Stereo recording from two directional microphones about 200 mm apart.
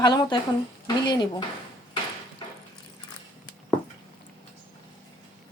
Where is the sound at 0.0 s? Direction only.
20° left (ahead or behind).